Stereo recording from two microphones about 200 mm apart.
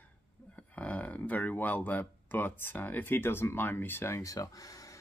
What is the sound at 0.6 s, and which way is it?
Speech, 5° left (ahead or behind).